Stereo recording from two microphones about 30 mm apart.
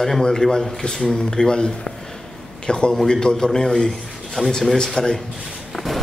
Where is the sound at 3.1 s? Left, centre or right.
Left.